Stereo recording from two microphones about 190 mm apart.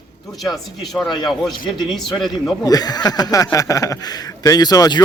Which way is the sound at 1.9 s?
Centre (ahead or behind).